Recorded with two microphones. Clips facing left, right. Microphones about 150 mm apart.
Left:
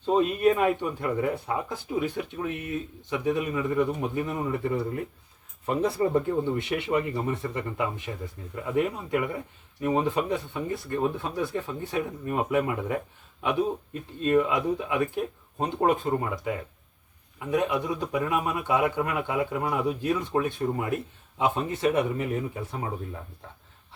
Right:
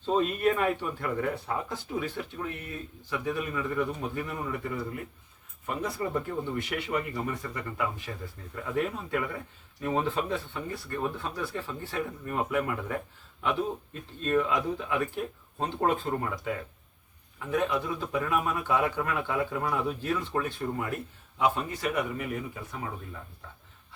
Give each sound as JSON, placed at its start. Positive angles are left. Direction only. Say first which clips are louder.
{"t": 0.0, "sound": "speech", "louder": "left 4 dB", "side_deg": 10}